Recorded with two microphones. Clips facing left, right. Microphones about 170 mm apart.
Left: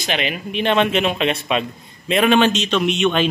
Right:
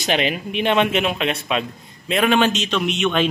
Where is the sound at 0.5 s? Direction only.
10° right (ahead or behind).